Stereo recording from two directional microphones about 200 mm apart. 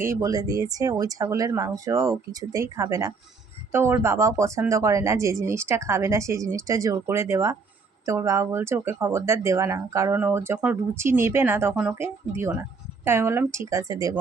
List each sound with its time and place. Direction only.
0.0 s speech: 15° right (ahead or behind)